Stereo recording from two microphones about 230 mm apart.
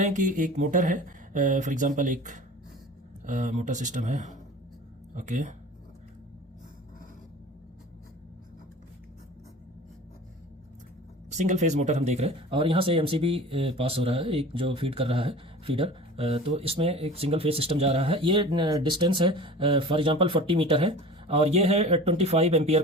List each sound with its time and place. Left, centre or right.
0.0 s speech: right
11.3 s speech: right